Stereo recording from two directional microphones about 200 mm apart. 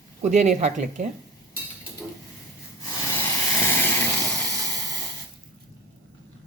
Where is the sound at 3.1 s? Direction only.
10° left (ahead or behind).